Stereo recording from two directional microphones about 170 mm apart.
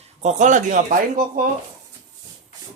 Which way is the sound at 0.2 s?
45° right (ahead or behind).